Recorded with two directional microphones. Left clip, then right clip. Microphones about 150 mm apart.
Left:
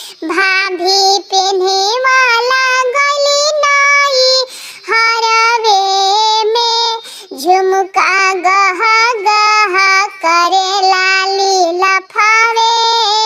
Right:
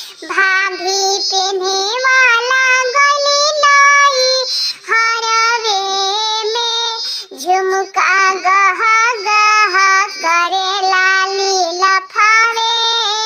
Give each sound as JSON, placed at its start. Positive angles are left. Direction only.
{"t": 0.3, "sound": "child singing", "side_deg": 50}